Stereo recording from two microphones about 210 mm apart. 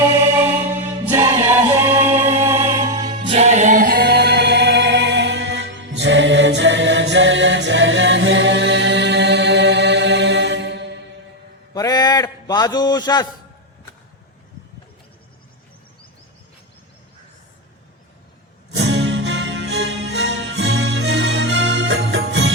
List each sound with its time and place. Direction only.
0.3 s music: 10° right (ahead or behind)
1.9 s music: 10° right (ahead or behind)
3.1 s music: 30° right (ahead or behind); by 10.8 s 55° right (ahead or behind)
11.7 s a sound: 20° left (ahead or behind)
18.7 s music: 55° right (ahead or behind)